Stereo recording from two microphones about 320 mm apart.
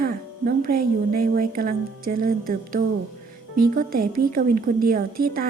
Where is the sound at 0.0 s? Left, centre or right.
Right.